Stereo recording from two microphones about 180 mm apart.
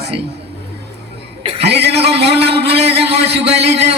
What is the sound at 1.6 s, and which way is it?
Speech, 70° right (ahead or behind).